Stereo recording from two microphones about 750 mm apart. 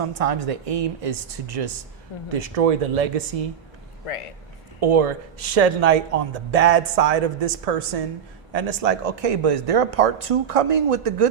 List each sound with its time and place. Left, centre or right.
0.0 s speech: right
2.3 s speech: right
4.8 s speech: right